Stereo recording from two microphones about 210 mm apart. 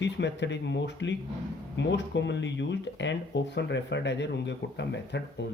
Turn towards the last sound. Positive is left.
turn(degrees=55)  # may be behind; listen again after turning